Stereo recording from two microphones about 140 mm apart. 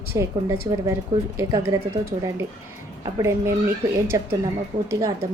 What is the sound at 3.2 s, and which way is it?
A woman's voice, 20° right (ahead or behind).